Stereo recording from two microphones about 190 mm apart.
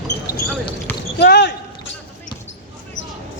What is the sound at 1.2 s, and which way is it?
Basketball bounce, 60° left (ahead or behind).